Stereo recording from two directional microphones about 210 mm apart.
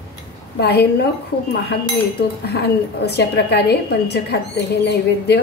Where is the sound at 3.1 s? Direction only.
50° left (ahead or behind).